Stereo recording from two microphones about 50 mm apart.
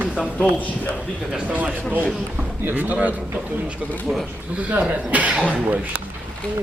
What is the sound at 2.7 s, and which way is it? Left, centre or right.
Speech, right.